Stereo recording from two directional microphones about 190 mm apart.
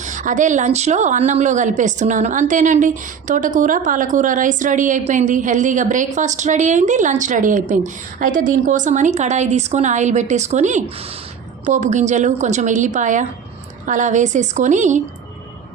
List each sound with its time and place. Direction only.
0.0 s a woman's voice: 40° right (ahead or behind)